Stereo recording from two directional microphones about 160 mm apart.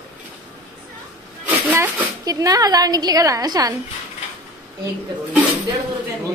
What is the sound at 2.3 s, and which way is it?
A woman's voice, 20° right (ahead or behind).